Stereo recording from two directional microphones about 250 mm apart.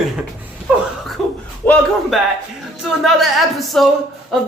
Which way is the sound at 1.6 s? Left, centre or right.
Centre.